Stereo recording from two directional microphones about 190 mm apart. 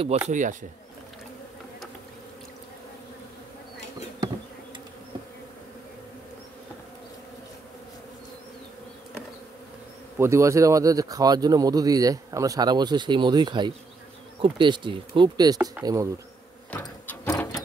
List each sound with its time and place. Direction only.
0.3 s speech: 40° right (ahead or behind)
10.1 s speech: 15° right (ahead or behind)
16.7 s a sound: 5° left (ahead or behind)